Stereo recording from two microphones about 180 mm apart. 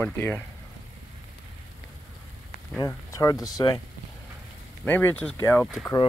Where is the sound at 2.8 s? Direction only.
20° left (ahead or behind).